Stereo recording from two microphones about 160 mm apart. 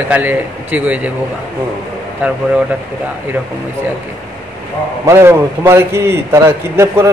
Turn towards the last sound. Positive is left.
turn(degrees=-15)  # may be behind; listen again after turning